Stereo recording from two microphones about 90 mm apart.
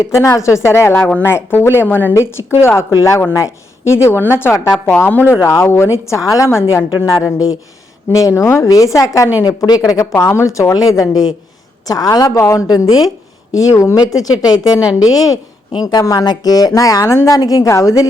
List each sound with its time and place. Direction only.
0.0 s a woman's voice: 35° left (ahead or behind)
4.9 s speech: 20° left (ahead or behind)
5.4 s a woman's voice: 35° left (ahead or behind)
8.1 s a woman's voice: 35° left (ahead or behind)
10.2 s a woman's voice: 30° left (ahead or behind)